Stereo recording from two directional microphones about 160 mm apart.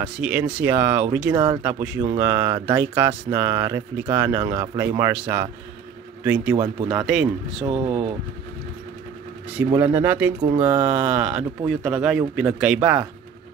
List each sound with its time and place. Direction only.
0.0 s speech: 10° right (ahead or behind)
1.3 s speech: 25° right (ahead or behind)
1.6 s speech: 15° right (ahead or behind)
6.5 s speech: 20° right (ahead or behind)
7.1 s speech: centre (ahead or behind)
7.6 s speech: 25° right (ahead or behind)
9.7 s speech: 10° right (ahead or behind)